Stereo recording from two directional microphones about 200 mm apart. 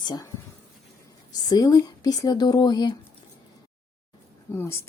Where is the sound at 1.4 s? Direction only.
20° left (ahead or behind).